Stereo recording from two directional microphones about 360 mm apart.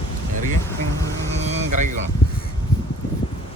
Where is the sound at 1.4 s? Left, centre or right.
Right.